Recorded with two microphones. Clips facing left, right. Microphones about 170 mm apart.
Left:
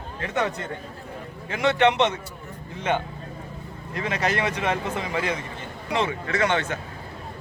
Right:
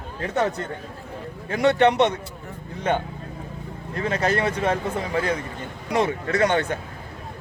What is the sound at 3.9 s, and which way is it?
Speech, 35° right (ahead or behind).